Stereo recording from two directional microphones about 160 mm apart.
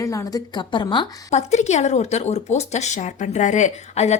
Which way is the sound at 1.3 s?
45° left (ahead or behind).